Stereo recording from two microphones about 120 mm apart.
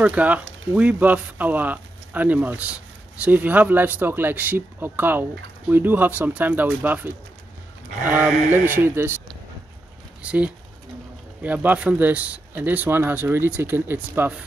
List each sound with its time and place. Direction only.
0.0 s speech: 10° right (ahead or behind)
10.2 s speech: 10° right (ahead or behind)